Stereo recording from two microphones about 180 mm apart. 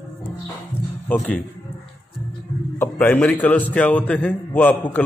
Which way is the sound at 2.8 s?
10° left (ahead or behind).